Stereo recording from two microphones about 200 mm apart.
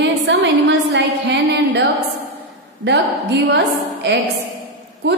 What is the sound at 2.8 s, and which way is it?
Speech, 60° right (ahead or behind).